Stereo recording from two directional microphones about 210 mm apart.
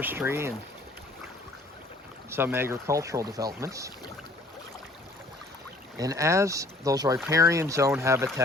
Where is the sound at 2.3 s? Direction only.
10° right (ahead or behind).